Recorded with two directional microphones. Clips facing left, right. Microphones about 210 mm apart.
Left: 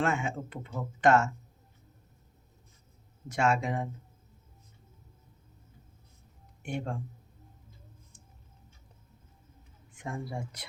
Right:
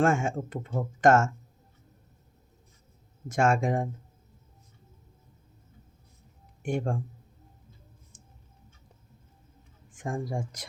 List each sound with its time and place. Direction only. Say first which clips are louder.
0.0 s speech: right 5 dB; 45° right (ahead or behind)
3.2 s speech: right 4 dB; 50° right (ahead or behind)
6.6 s speech: right 6 dB; 50° right (ahead or behind)
9.9 s speech: right 5 dB; 45° right (ahead or behind)